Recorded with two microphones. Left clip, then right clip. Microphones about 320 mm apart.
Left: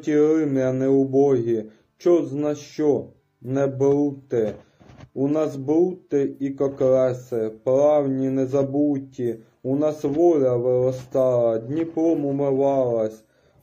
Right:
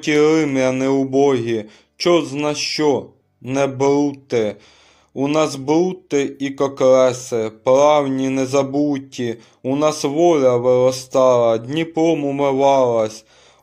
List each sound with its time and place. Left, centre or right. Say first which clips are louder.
0.0 s speech: right 4 dB; right
2.0 s speech: right 3 dB; right
2.7 s speech: right 2 dB; right